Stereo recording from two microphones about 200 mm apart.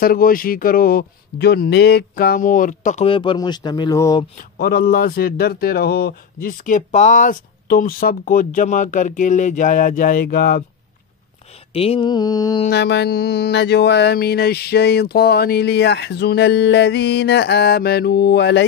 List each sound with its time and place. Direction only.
0.0 s speech: 45° left (ahead or behind)
3.1 s speech: 25° left (ahead or behind)
4.4 s speech: 50° left (ahead or behind)
11.7 s speech: 30° left (ahead or behind)
12.6 s speech: 55° left (ahead or behind)